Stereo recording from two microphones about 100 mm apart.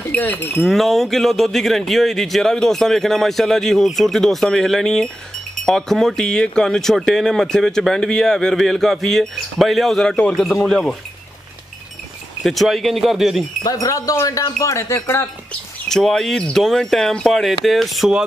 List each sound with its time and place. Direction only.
0.1 s speech: 20° left (ahead or behind)
0.7 s speech: centre (ahead or behind)
12.4 s speech: centre (ahead or behind)
13.7 s speech: 35° left (ahead or behind)
15.9 s speech: 5° left (ahead or behind)